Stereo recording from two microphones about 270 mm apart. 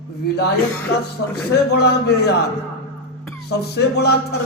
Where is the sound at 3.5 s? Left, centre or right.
Left.